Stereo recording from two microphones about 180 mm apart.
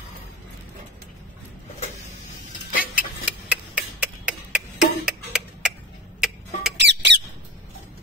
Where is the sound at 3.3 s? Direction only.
5° right (ahead or behind).